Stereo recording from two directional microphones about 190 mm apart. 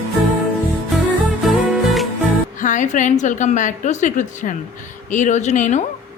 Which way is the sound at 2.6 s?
40° left (ahead or behind).